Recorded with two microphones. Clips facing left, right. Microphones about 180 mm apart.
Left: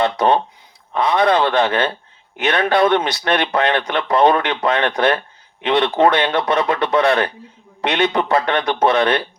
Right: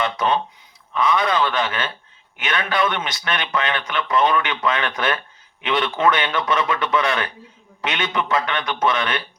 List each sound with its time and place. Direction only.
0.0 s speech: 35° left (ahead or behind)